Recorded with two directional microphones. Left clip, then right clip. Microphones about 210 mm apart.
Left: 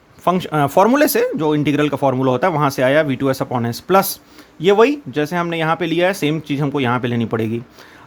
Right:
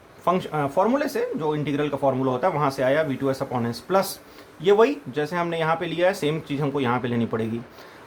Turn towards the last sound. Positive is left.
turn(degrees=30)  # may be behind; listen again after turning